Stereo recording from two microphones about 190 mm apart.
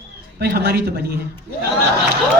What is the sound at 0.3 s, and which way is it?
Speech, 60° right (ahead or behind).